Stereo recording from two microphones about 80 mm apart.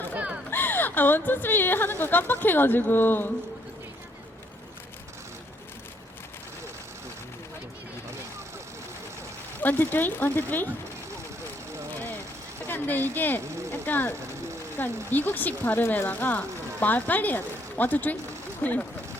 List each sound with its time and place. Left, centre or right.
0.5 s speech: left
9.6 s speech: left
12.6 s speech: left